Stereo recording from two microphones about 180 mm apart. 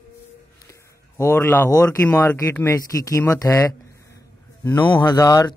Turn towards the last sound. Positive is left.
turn(degrees=20)  # may be behind; listen again after turning